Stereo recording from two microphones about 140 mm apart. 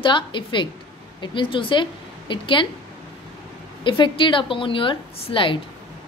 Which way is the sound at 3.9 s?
35° left (ahead or behind).